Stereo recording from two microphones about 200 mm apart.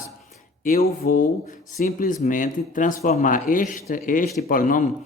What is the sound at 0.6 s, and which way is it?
A man's voice, 45° left (ahead or behind).